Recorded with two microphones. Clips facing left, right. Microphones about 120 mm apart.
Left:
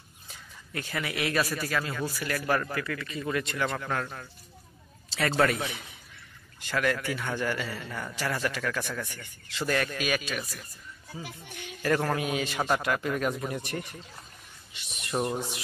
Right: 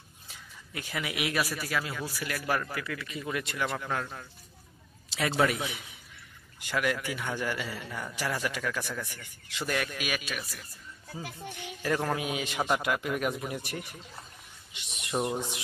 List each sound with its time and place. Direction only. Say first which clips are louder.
0.7 s a man's voice: left 2 dB; 10° right (ahead or behind)
11.8 s a man's voice: left 3 dB; 10° right (ahead or behind)